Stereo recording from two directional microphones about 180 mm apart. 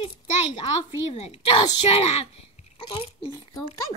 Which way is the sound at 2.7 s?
30° left (ahead or behind).